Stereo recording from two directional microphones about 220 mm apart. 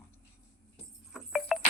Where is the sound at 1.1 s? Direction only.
Centre (ahead or behind).